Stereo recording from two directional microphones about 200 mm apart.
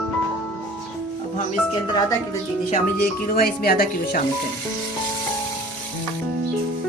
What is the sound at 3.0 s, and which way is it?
Speech, 50° left (ahead or behind).